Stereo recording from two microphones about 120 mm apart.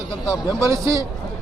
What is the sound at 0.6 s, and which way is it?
Speech, 25° right (ahead or behind).